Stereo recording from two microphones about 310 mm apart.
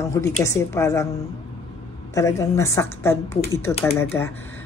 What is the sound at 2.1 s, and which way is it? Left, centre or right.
Speech, centre.